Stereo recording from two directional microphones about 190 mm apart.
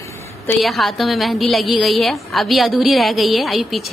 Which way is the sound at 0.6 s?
Centre (ahead or behind).